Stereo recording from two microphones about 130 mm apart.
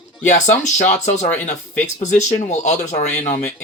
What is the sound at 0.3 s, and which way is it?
Speech, 65° left (ahead or behind).